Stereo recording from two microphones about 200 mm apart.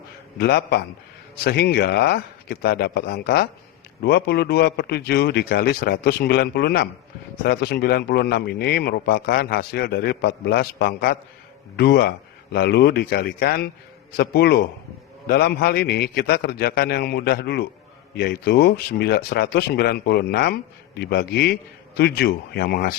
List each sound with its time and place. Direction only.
0.3 s speech: 55° left (ahead or behind)